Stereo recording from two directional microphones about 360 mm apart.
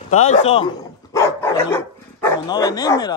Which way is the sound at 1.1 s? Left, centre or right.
Centre.